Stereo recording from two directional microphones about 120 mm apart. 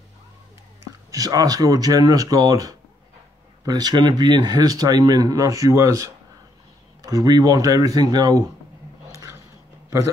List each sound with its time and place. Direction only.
1.1 s speech: 30° right (ahead or behind)